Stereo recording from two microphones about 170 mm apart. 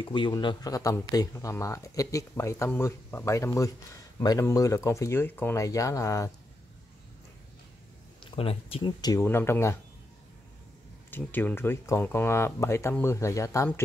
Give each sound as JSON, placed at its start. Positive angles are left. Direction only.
{"t": 0.0, "sound": "speech", "side_deg": 30}
{"t": 8.3, "sound": "speech", "side_deg": 35}
{"t": 11.1, "sound": "speech", "side_deg": 10}